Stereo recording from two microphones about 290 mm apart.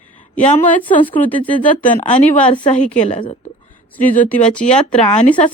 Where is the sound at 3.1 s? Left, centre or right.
Centre.